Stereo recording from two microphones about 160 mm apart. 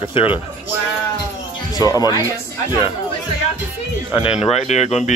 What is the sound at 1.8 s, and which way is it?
Speech, 25° left (ahead or behind).